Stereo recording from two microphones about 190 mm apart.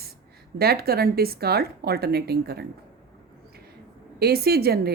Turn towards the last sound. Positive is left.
turn(degrees=-55)  # may be behind; listen again after turning